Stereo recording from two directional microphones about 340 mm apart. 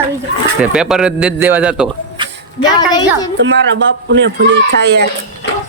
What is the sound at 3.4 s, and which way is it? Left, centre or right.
Speech, right.